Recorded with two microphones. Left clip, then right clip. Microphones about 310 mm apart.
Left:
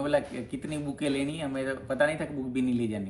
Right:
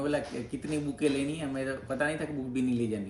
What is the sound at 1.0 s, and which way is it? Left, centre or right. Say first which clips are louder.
A man's voice: even; centre.